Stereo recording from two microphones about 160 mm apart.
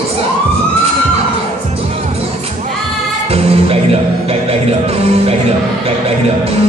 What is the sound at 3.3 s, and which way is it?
Music, 40° right (ahead or behind).